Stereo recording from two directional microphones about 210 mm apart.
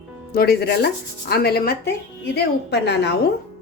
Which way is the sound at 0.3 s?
50° left (ahead or behind).